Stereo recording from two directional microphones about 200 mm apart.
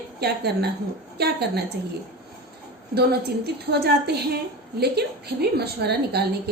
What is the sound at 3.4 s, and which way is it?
Speech, 55° right (ahead or behind).